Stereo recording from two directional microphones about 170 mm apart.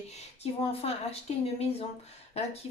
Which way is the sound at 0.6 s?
35° left (ahead or behind).